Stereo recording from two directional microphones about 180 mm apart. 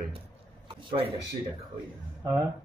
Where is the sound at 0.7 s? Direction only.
30° right (ahead or behind).